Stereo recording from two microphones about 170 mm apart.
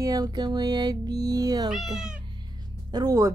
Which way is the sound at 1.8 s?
Centre (ahead or behind).